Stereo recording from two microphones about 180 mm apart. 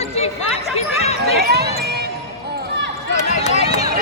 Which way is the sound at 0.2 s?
35° left (ahead or behind).